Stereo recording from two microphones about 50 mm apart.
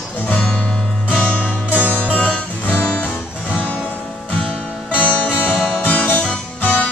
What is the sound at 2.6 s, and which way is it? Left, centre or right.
Music, left.